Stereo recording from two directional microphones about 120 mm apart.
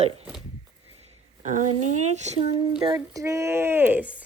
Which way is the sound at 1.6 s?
80° right.